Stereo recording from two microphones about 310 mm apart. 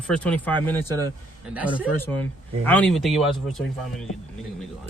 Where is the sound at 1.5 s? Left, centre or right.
Centre.